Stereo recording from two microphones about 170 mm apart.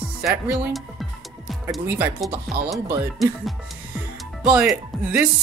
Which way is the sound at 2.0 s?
20° right (ahead or behind).